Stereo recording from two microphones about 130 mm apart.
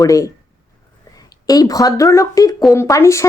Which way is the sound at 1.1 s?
30° left (ahead or behind).